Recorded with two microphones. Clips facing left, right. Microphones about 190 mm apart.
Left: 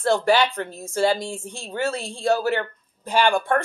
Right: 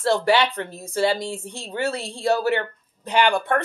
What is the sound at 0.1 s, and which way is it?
Speech, 20° right (ahead or behind).